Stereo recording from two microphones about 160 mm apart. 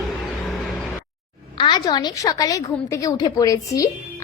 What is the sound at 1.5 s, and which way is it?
A woman's voice, 30° left (ahead or behind).